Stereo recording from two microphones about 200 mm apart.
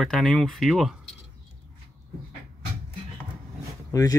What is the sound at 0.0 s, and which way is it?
Speech, centre (ahead or behind).